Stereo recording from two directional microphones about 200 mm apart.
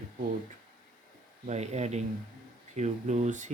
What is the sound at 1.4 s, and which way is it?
Speech, 35° right (ahead or behind).